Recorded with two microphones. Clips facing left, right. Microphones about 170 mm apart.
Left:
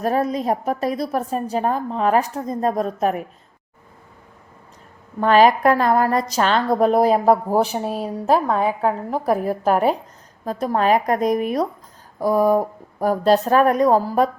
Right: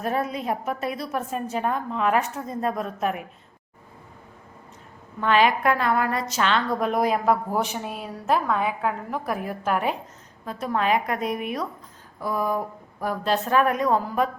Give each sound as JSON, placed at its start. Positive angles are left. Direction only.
{"t": 0.0, "sound": "a woman's voice", "side_deg": 40}
{"t": 5.2, "sound": "a woman's voice", "side_deg": 40}